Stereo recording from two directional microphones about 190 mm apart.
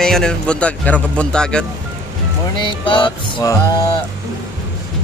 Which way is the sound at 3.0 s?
20° left (ahead or behind).